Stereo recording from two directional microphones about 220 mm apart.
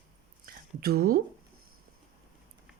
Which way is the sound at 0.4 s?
45° right (ahead or behind).